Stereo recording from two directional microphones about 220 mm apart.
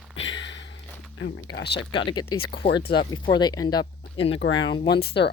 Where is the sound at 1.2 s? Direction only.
55° left (ahead or behind).